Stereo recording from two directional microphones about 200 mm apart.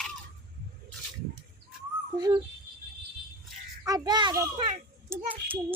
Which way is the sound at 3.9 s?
20° right (ahead or behind).